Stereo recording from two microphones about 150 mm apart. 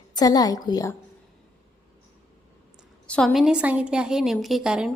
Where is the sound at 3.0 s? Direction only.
5° left (ahead or behind).